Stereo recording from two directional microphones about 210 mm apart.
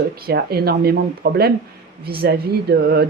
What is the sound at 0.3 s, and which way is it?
Speech, 50° right (ahead or behind).